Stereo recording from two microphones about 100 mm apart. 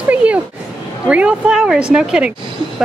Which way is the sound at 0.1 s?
15° right (ahead or behind).